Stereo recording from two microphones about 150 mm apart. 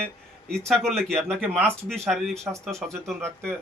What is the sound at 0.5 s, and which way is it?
Speech, 5° left (ahead or behind).